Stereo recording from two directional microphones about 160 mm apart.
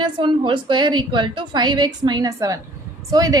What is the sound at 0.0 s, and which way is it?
A woman's voice, 30° right (ahead or behind).